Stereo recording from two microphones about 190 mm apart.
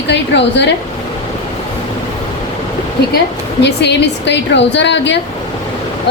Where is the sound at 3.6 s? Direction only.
65° left (ahead or behind).